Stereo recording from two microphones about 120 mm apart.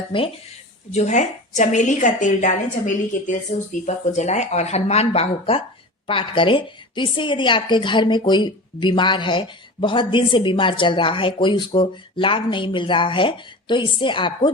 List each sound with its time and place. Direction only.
0.9 s a woman's voice: 75° left (ahead or behind)
3.8 s a woman's voice: 75° left (ahead or behind); by 14.5 s 45° left (ahead or behind)